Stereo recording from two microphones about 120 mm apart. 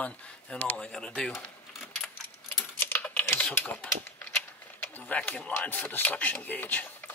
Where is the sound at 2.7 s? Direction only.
15° left (ahead or behind).